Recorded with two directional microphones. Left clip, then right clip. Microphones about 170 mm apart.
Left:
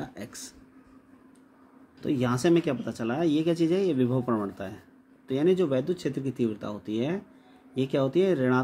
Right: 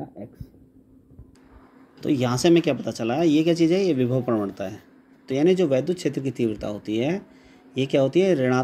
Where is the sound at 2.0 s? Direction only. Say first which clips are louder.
Right 5 dB; 20° right (ahead or behind).